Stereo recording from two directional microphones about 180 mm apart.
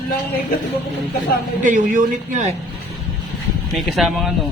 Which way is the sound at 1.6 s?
45° right (ahead or behind).